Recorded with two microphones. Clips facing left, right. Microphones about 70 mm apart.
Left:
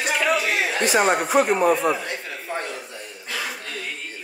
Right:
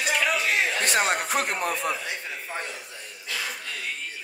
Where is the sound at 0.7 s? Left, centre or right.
Centre.